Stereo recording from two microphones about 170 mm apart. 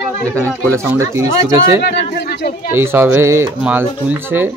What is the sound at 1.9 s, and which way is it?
Speech, 65° left (ahead or behind).